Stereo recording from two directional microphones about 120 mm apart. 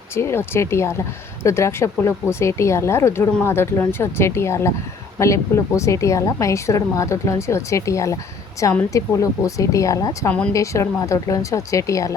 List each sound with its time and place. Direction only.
0.1 s a woman's voice: 20° left (ahead or behind)